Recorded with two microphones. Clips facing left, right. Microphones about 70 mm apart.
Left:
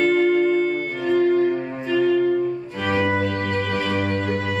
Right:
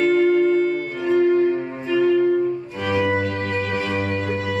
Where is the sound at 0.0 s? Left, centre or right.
Centre.